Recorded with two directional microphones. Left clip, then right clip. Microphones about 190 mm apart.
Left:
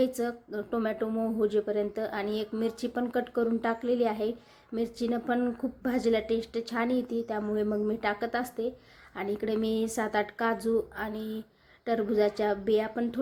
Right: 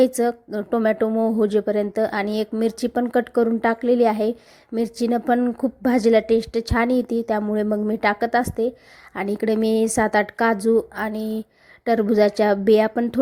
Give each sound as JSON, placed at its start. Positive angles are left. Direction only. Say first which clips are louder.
{"t": 0.0, "sound": "a woman's voice", "louder": "right 11 dB", "side_deg": -40}